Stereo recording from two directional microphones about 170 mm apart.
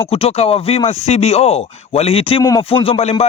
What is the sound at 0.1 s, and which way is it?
Speech, 35° left (ahead or behind).